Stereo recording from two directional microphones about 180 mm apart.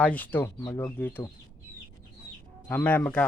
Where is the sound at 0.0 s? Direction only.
10° left (ahead or behind).